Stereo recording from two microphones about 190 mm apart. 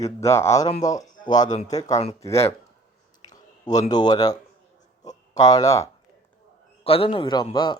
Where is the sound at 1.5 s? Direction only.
40° left (ahead or behind).